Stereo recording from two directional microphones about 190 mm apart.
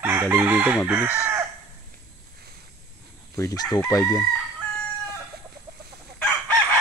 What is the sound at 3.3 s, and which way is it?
Speech, 15° left (ahead or behind).